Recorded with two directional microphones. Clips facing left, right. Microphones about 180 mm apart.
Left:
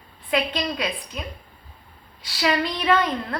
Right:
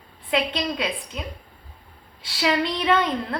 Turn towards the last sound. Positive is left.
turn(degrees=-25)  # may be behind; listen again after turning